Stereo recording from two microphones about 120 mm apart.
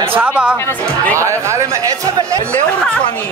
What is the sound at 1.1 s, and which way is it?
Speech, 25° right (ahead or behind).